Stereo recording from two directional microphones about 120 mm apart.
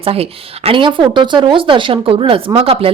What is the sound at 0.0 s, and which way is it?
Speech, 55° right (ahead or behind).